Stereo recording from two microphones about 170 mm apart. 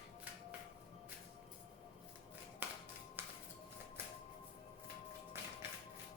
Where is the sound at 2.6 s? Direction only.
10° right (ahead or behind).